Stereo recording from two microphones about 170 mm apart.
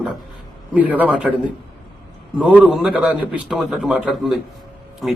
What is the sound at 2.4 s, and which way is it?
A man's voice, 5° right (ahead or behind).